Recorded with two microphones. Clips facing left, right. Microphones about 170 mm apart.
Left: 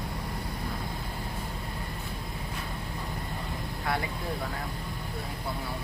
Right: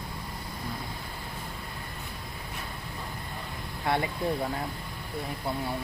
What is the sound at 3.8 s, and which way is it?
Speech, 25° right (ahead or behind).